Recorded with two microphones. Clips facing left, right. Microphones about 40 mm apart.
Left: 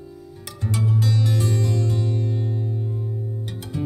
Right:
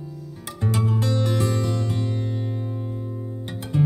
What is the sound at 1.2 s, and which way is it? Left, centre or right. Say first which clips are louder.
Music: even; right.